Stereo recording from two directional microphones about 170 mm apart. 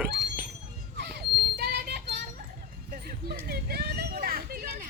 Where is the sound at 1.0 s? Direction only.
75° right (ahead or behind).